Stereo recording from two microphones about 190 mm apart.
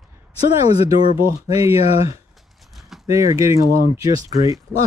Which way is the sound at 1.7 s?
30° left (ahead or behind).